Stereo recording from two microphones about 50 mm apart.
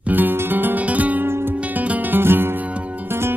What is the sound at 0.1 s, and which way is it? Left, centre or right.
Music, right.